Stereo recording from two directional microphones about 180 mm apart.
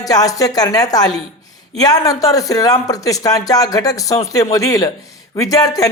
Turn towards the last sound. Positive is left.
turn(degrees=20)  # may be behind; listen again after turning